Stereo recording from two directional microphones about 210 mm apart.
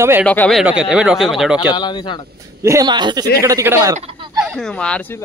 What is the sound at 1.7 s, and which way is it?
Speech, 20° left (ahead or behind).